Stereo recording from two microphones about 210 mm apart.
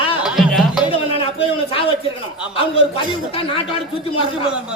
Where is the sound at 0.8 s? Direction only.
25° left (ahead or behind).